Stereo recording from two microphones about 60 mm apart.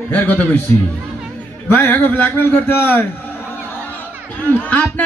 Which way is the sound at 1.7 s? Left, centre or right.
Left.